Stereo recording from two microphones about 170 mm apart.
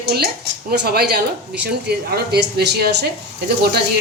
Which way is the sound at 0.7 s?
65° right (ahead or behind).